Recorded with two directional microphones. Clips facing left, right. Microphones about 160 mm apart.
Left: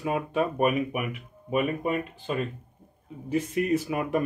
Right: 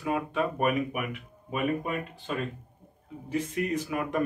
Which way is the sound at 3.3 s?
10° left (ahead or behind).